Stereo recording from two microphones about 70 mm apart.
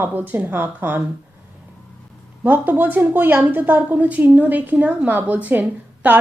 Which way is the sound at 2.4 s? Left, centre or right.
Right.